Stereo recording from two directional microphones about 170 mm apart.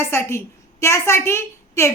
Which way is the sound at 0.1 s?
15° left (ahead or behind).